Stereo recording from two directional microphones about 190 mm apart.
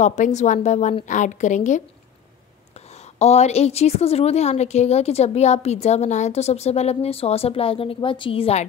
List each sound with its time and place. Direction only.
0.0 s a woman's voice: 40° left (ahead or behind)
3.2 s a woman's voice: 35° left (ahead or behind)